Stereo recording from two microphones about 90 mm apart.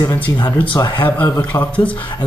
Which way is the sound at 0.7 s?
60° left (ahead or behind).